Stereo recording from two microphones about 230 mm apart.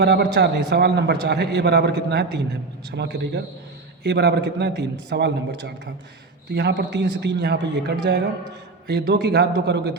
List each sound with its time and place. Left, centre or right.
0.0 s a man's voice: right